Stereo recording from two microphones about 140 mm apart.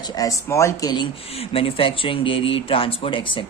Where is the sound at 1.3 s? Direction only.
45° left (ahead or behind).